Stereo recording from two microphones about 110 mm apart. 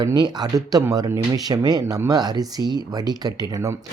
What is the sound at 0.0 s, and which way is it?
Speech, 40° right (ahead or behind).